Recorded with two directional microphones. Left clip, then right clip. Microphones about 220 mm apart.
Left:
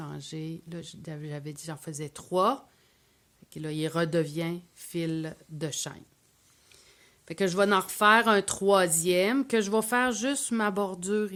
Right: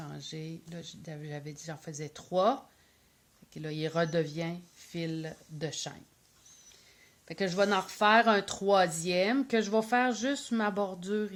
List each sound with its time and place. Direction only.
0.0 s speech: 45° left (ahead or behind)
7.3 s speech: 40° left (ahead or behind)